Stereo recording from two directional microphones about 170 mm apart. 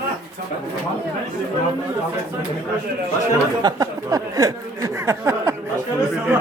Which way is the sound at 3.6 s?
25° right (ahead or behind).